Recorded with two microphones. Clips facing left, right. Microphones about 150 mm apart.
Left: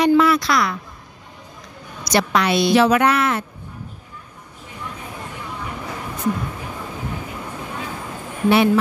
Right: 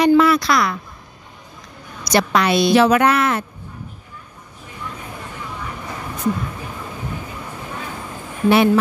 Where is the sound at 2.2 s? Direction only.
45° right (ahead or behind).